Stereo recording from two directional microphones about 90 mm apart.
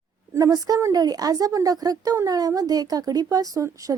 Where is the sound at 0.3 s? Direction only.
45° right (ahead or behind).